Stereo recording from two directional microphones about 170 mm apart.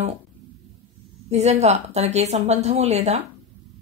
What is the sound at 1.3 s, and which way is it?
Speech, 40° right (ahead or behind).